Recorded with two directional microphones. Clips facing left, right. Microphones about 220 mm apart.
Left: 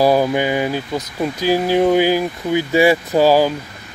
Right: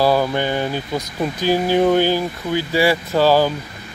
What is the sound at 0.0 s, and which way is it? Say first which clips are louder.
Speech: left 2 dB; 15° left (ahead or behind).